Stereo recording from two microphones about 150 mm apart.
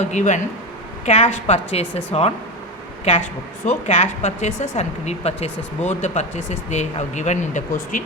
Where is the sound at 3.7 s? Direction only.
50° left (ahead or behind).